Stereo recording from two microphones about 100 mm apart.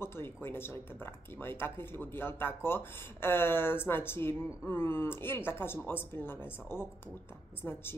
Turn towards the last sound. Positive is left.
turn(degrees=20)  # may be behind; listen again after turning